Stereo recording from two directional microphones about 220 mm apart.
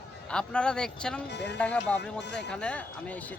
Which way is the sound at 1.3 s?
50° left (ahead or behind).